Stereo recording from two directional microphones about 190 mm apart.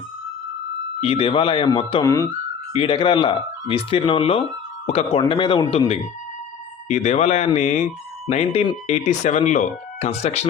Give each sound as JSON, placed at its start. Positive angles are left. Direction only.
{"t": 1.0, "sound": "speech", "side_deg": 30}
{"t": 6.8, "sound": "speech", "side_deg": 40}